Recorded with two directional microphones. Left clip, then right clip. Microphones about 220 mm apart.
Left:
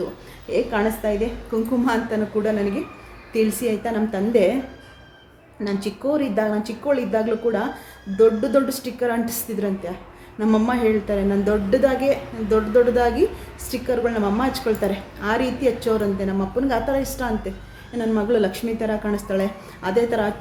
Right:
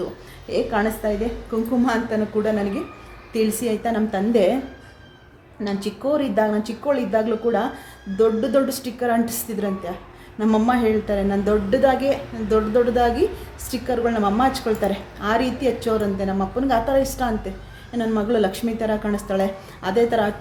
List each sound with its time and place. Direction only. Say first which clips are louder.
0.5 s a woman's voice: even; centre (ahead or behind)
5.6 s a woman's voice: even; 5° right (ahead or behind)